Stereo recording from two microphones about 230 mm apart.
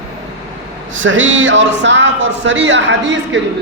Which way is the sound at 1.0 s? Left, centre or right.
Right.